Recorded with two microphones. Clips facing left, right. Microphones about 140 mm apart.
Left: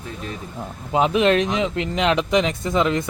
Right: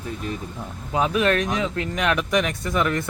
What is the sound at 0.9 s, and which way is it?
Speech, 25° left (ahead or behind).